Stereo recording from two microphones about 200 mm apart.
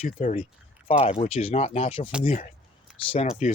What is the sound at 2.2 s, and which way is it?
Speech, 40° left (ahead or behind).